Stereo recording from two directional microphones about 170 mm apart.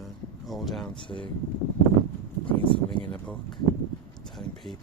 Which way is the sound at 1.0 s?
30° left (ahead or behind).